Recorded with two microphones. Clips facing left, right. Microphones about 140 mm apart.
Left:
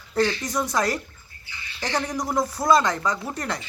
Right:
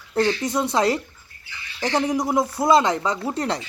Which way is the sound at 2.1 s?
25° right (ahead or behind).